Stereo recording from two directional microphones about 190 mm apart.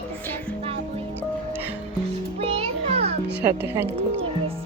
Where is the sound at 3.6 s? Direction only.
10° right (ahead or behind).